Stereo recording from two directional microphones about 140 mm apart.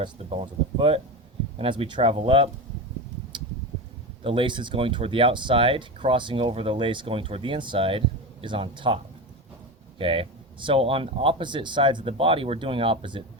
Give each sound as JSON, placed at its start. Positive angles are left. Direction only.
{"t": 0.0, "sound": "speech", "side_deg": -40}
{"t": 4.2, "sound": "speech", "side_deg": -40}
{"t": 10.0, "sound": "speech", "side_deg": -40}